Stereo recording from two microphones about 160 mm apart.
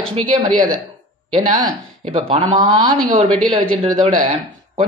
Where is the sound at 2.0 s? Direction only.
35° right (ahead or behind).